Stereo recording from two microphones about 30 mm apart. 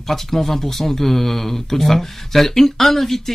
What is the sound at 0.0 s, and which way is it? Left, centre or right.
Speech, centre.